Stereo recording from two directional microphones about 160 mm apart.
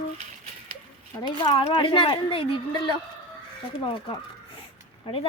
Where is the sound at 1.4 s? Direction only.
30° left (ahead or behind).